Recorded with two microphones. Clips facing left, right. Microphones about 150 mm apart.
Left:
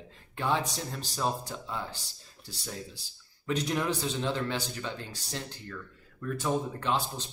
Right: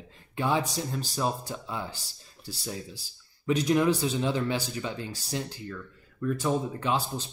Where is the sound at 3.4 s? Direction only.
5° right (ahead or behind).